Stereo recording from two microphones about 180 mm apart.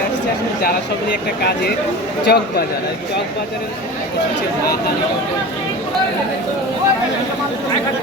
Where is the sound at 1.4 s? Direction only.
65° left (ahead or behind).